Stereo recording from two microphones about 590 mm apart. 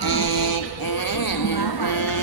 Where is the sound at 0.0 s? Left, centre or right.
Left.